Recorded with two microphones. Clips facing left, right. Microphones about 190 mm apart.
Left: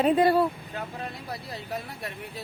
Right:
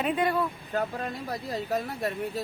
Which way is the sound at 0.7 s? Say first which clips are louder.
Right 5 dB; 45° right (ahead or behind).